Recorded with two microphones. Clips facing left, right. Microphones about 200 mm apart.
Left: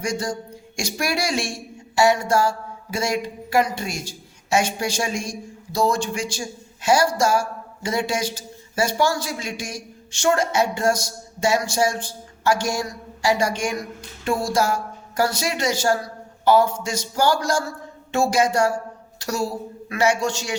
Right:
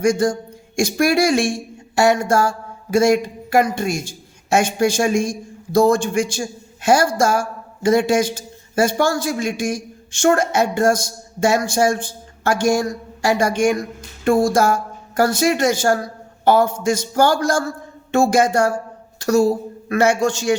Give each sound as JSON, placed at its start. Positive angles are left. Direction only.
{"t": 0.0, "sound": "speech", "side_deg": -50}